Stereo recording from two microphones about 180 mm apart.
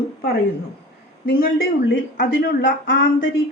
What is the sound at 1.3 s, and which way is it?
A woman's voice, 55° left (ahead or behind).